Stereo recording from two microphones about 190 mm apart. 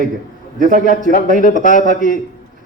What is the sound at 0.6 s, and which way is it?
Speech, 45° right (ahead or behind).